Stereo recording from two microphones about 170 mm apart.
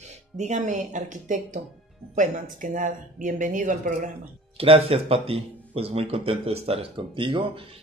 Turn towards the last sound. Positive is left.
turn(degrees=-30)  # may be behind; listen again after turning